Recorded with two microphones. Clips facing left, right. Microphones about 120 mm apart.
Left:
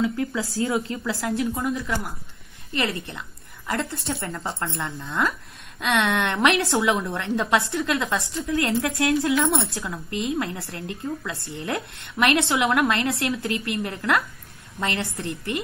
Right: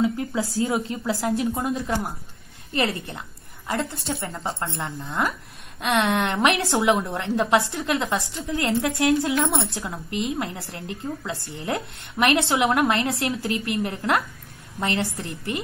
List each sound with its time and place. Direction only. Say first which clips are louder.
0.0 s a woman's voice: right 1 dB; 25° right (ahead or behind)
3.1 s a sound: right 1 dB; 30° right (ahead or behind)
4.3 s a woman's voice: even; 20° right (ahead or behind)